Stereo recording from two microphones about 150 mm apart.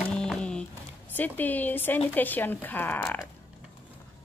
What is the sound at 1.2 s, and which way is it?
Speech, 10° left (ahead or behind).